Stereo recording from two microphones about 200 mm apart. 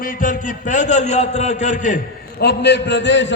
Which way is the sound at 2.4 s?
55° left (ahead or behind).